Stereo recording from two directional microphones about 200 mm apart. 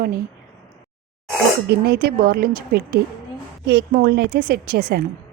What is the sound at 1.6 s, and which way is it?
Speech, 55° right (ahead or behind).